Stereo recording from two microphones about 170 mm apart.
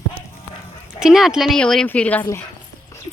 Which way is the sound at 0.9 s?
5° right (ahead or behind).